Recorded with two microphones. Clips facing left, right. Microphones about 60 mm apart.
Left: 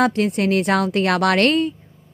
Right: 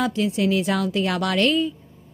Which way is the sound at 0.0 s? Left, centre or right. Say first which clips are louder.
Left 4 dB; left.